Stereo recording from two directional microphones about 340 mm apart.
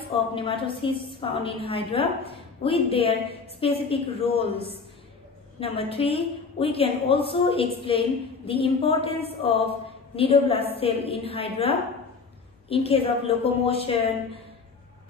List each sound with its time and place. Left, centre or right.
0.3 s a woman's voice: centre